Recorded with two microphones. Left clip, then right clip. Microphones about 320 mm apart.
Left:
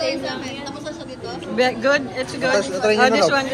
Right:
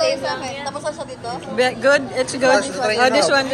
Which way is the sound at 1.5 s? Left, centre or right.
Centre.